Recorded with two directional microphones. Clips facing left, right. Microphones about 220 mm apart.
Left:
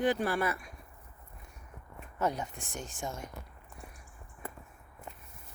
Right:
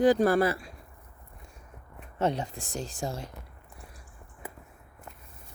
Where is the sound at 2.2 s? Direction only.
30° right (ahead or behind).